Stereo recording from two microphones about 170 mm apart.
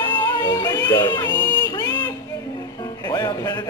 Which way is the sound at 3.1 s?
25° left (ahead or behind).